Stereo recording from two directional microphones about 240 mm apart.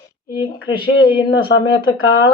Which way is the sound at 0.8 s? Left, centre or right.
Left.